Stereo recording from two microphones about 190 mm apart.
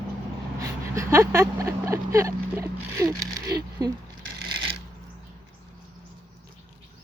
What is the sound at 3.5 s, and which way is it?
Speech, 20° right (ahead or behind).